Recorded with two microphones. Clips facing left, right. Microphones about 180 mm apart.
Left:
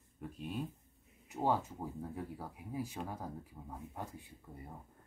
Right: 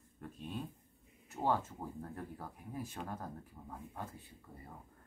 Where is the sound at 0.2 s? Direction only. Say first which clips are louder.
Left 3 dB; 10° left (ahead or behind).